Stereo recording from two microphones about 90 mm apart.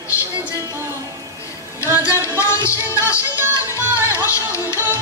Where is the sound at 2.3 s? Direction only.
30° left (ahead or behind).